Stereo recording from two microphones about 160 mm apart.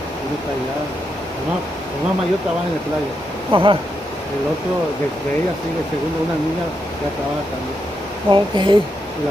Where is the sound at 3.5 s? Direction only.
35° right (ahead or behind).